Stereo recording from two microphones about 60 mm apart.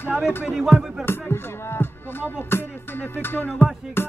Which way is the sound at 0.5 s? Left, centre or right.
Centre.